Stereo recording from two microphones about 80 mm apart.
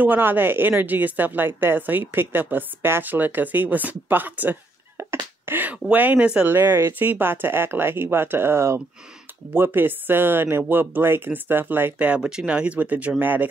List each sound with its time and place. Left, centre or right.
0.0 s a woman's voice: right
6.4 s a woman's voice: right
12.1 s a woman's voice: centre